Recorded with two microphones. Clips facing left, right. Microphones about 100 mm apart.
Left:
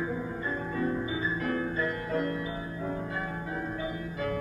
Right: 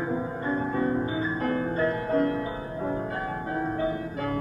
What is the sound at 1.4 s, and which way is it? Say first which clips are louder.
Music: right 6 dB; 35° right (ahead or behind).